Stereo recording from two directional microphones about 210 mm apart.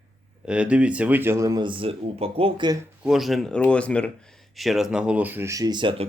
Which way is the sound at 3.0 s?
Centre (ahead or behind).